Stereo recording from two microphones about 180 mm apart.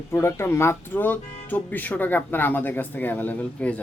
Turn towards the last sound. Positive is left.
turn(degrees=5)  # may be behind; listen again after turning